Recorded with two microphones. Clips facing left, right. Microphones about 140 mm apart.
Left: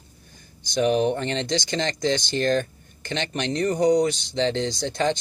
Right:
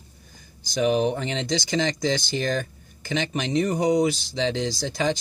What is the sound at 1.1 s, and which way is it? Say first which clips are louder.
Speech: left 1 dB; 5° right (ahead or behind).